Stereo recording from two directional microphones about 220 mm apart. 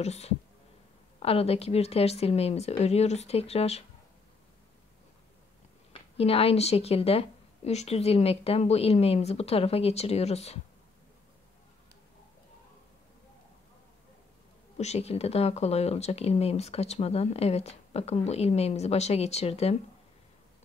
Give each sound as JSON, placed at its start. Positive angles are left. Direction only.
{"t": 0.0, "sound": "speech", "side_deg": 30}
{"t": 6.1, "sound": "speech", "side_deg": 25}
{"t": 14.8, "sound": "speech", "side_deg": 30}